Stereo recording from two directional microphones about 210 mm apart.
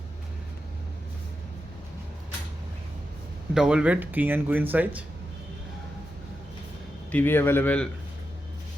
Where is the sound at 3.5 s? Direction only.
5° right (ahead or behind).